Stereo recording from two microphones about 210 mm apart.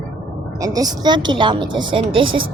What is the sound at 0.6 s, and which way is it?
A woman's voice, 15° right (ahead or behind).